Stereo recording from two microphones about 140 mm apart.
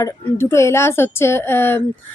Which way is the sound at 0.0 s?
20° left (ahead or behind).